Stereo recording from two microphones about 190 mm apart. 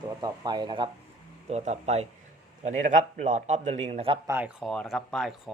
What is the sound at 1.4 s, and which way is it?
A man's voice, 35° right (ahead or behind).